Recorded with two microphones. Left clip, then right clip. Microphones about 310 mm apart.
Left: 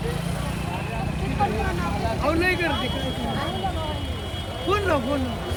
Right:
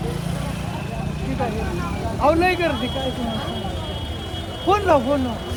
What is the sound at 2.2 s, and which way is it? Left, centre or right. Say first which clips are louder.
Speech: right 6 dB; centre.